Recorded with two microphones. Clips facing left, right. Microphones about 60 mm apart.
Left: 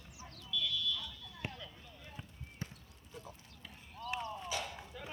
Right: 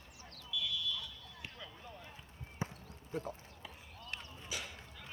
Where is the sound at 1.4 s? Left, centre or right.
Left.